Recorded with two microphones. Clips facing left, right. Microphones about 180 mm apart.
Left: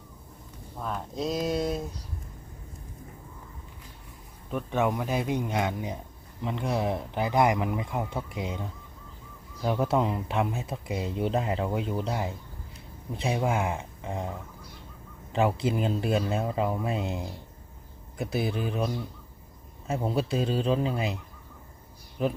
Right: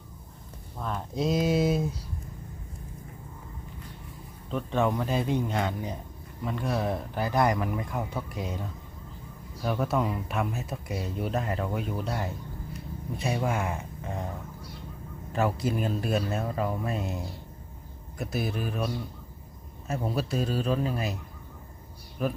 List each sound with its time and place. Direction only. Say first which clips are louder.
0.8 s speech: right 2 dB; centre (ahead or behind)
4.5 s speech: even; 10° left (ahead or behind)
9.6 s speech: left 2 dB; 25° left (ahead or behind)
15.3 s speech: left 2 dB; 20° left (ahead or behind)
19.9 s speech: left 2 dB; 25° left (ahead or behind)